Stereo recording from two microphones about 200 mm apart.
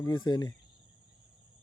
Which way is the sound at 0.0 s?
20° left (ahead or behind).